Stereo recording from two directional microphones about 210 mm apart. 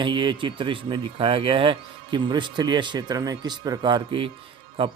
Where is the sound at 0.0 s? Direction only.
20° right (ahead or behind).